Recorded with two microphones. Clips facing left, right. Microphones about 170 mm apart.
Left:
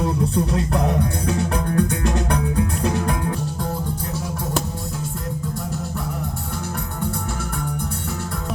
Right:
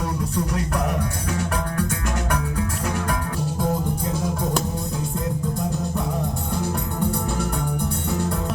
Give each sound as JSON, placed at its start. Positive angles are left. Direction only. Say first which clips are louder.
{"t": 0.0, "sound": "music", "louder": "left 4 dB", "side_deg": 25}